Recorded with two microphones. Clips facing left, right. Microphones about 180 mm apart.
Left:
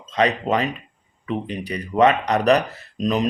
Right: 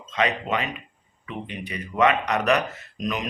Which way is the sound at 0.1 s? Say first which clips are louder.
Left 5 dB; 35° left (ahead or behind).